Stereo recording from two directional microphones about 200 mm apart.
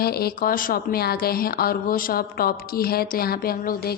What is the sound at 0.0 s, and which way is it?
A woman's voice, 50° left (ahead or behind).